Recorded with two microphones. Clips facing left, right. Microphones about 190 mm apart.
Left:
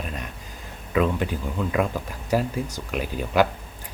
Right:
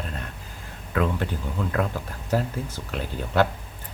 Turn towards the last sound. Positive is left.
turn(degrees=15)  # may be behind; listen again after turning